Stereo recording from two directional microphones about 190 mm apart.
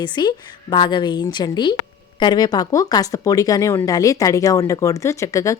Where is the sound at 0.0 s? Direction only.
25° left (ahead or behind).